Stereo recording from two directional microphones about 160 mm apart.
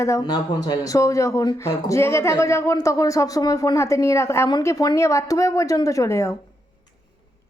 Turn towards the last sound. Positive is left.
turn(degrees=20)  # may be behind; listen again after turning